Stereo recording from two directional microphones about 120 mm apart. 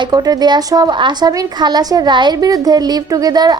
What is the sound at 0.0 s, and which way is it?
A woman's voice, 35° right (ahead or behind).